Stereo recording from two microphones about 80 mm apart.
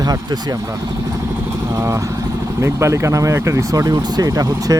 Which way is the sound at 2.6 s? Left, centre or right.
Right.